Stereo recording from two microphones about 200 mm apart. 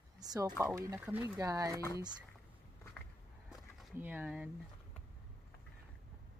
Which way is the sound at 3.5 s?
10° right (ahead or behind).